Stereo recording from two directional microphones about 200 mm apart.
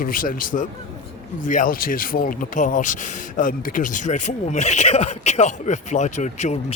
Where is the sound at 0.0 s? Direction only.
45° left (ahead or behind).